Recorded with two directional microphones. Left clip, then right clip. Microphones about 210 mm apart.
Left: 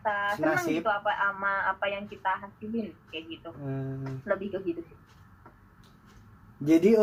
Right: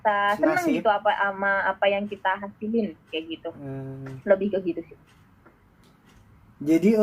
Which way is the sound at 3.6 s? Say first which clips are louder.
Even; 15° right (ahead or behind).